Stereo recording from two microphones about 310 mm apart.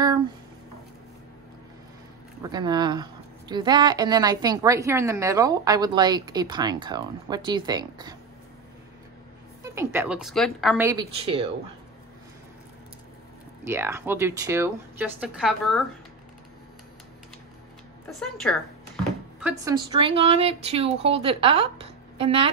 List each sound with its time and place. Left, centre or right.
2.4 s speech: centre
9.6 s speech: centre
13.7 s speech: centre
18.2 s a woman's voice: centre
19.4 s speech: centre